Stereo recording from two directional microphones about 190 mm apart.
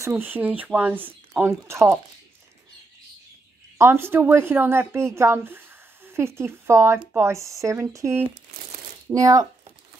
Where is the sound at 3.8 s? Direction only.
10° right (ahead or behind).